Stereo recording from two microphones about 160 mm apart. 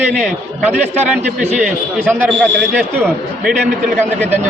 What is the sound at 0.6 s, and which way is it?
A man's voice, 10° right (ahead or behind).